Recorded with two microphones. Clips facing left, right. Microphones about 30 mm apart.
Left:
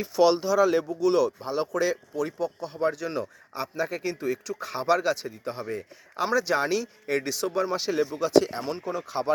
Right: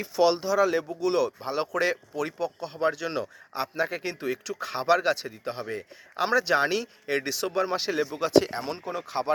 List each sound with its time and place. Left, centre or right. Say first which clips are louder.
0.0 s speech: left 2 dB; centre
1.0 s speech: left 3 dB; centre
1.5 s a man's voice: even; right
2.9 s speech: even; right
4.6 s a man's voice: right 1 dB; right
7.8 s speech: left 1 dB; centre
8.1 s speech: even; right